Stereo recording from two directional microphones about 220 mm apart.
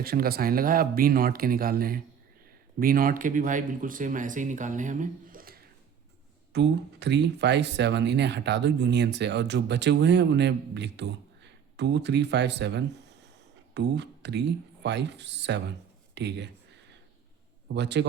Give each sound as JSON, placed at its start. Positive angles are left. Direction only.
{"t": 0.0, "sound": "speech", "side_deg": -45}
{"t": 6.5, "sound": "speech", "side_deg": -50}
{"t": 17.7, "sound": "speech", "side_deg": -50}